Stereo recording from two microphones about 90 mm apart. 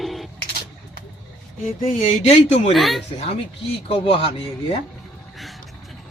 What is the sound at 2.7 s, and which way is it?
Speech, centre (ahead or behind).